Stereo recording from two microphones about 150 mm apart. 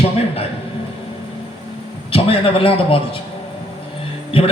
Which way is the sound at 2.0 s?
40° left (ahead or behind).